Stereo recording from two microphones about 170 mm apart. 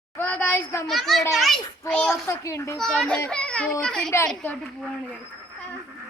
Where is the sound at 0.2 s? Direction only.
10° left (ahead or behind).